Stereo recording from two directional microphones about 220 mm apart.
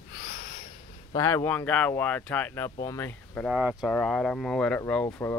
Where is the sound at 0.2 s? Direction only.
40° left (ahead or behind).